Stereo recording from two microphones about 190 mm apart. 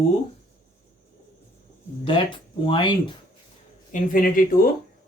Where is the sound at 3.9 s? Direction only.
45° left (ahead or behind).